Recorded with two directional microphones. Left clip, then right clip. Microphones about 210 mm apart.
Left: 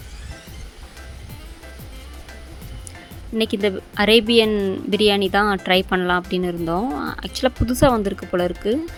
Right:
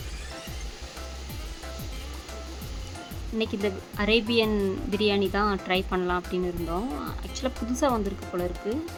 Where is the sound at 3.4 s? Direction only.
25° left (ahead or behind).